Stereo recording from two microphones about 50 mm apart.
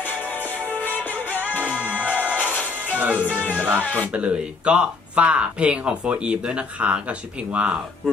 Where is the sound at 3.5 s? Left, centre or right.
Right.